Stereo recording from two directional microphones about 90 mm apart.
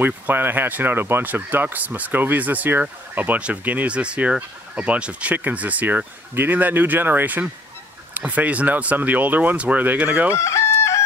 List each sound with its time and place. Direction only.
0.0 s speech: 20° right (ahead or behind)
10.3 s chicken: 30° left (ahead or behind)